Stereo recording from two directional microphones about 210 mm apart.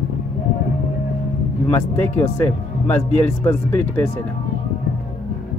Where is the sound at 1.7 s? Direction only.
10° left (ahead or behind).